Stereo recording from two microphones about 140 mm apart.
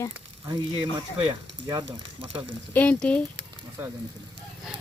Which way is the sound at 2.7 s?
10° left (ahead or behind).